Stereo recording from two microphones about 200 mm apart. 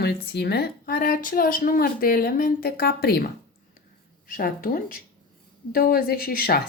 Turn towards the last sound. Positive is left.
turn(degrees=45)  # may be behind; listen again after turning